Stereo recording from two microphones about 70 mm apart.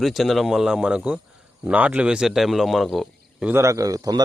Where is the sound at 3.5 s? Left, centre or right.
Right.